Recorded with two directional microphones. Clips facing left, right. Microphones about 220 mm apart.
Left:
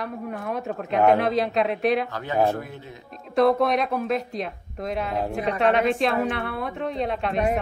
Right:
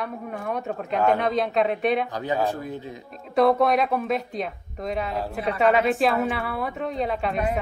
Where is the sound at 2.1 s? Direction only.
15° right (ahead or behind).